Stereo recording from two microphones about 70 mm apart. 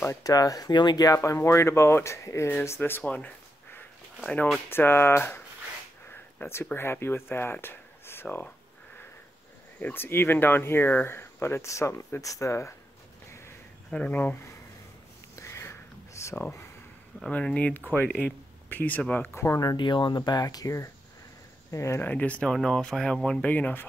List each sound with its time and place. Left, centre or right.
0.1 s speech: left
3.0 s a sound: centre
4.6 s speech: left
6.4 s speech: left
9.8 s speech: left
13.8 s speech: centre
15.3 s a sound: left
17.3 s speech: centre
19.3 s speech: left
19.6 s speech: left
22.0 s speech: left
22.5 s speech: centre
23.5 s speech: left